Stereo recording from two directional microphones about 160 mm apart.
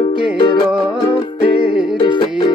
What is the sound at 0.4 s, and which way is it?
Music, 30° left (ahead or behind).